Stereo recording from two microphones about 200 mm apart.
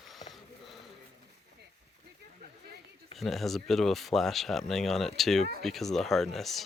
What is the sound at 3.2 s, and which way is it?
Speech, centre (ahead or behind).